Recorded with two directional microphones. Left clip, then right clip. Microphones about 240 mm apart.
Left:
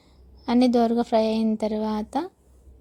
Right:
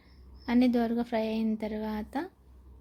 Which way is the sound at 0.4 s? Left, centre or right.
Left.